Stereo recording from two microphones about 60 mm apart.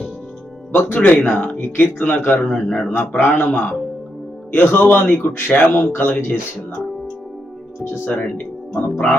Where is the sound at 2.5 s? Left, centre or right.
Left.